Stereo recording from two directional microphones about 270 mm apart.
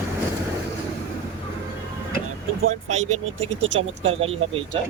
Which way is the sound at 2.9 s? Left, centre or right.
Right.